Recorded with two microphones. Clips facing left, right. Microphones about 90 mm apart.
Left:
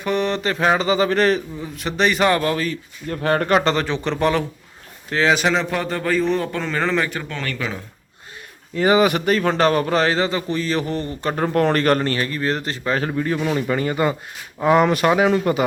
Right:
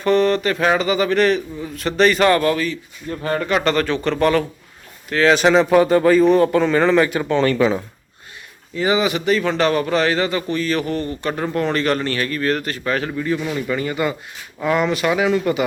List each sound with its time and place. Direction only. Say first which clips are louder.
0.0 s a man's voice: right 5 dB; 15° left (ahead or behind); by 1.4 s 35° left (ahead or behind)
1.7 s a man's voice: right 4 dB; 15° left (ahead or behind)
2.6 s speech: even; 55° left (ahead or behind)
3.5 s a man's voice: even; 25° left (ahead or behind)
5.3 s a man's voice: right 9 dB; centre (ahead or behind)
7.3 s speech: right 11 dB; 30° right (ahead or behind)
8.7 s a man's voice: left 2 dB; 45° left (ahead or behind)
11.5 s a man's voice: left 3 dB; 50° left (ahead or behind)
12.2 s a man's voice: right 2 dB; 25° left (ahead or behind)
14.8 s a man's voice: left 2 dB; 45° left (ahead or behind)